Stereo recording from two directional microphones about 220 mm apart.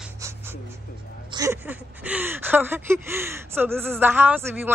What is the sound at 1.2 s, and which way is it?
Speech, 15° right (ahead or behind).